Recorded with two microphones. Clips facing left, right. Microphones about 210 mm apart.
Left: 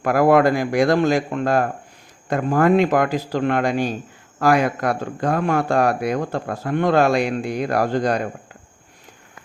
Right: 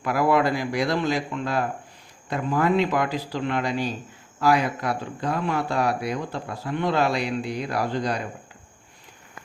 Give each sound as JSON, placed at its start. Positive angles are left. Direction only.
{"t": 0.0, "sound": "speech", "side_deg": 50}